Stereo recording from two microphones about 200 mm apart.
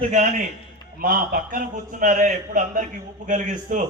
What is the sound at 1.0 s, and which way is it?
A man's voice, 45° right (ahead or behind).